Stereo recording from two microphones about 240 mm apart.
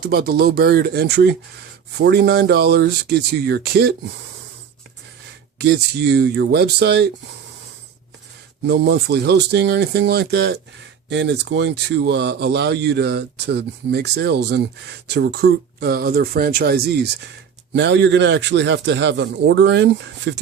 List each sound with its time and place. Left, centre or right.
0.0 s speech: right
5.5 s speech: right
8.6 s speech: right